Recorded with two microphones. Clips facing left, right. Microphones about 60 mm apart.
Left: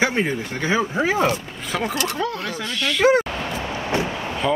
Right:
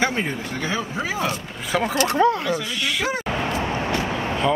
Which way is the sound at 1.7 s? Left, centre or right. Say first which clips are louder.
Right 2 dB; centre.